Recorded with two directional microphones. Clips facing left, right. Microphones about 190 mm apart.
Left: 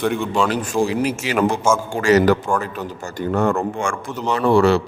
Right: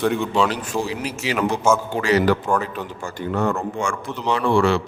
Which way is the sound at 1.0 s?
50° left (ahead or behind).